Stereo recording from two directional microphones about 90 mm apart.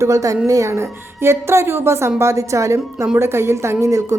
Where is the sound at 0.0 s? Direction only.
35° right (ahead or behind).